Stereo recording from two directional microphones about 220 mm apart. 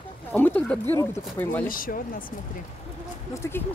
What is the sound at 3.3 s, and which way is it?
Speech, 10° left (ahead or behind).